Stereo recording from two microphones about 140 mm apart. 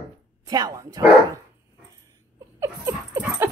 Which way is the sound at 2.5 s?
20° right (ahead or behind).